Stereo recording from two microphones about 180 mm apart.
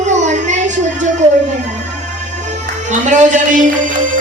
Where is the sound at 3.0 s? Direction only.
45° right (ahead or behind).